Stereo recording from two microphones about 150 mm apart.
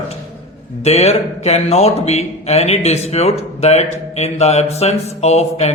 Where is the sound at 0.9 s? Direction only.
45° left (ahead or behind).